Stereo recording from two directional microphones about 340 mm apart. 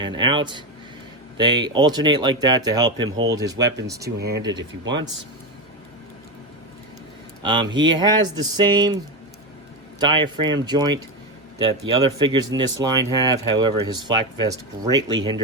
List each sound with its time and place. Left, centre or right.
0.0 s speech: centre
3.6 s speech: right
3.8 s speech: centre
4.5 s speech: right
7.4 s speech: centre
12.2 s speech: centre